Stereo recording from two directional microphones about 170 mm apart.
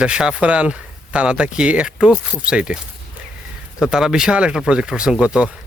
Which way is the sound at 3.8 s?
5° right (ahead or behind).